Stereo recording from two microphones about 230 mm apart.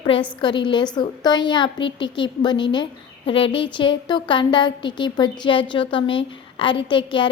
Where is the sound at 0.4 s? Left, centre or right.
Centre.